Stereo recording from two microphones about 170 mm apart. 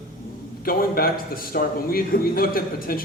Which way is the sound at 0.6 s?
60° left (ahead or behind).